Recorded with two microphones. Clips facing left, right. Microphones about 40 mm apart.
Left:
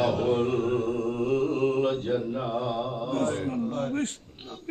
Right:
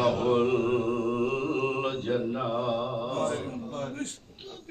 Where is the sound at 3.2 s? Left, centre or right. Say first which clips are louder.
Left 3 dB; left.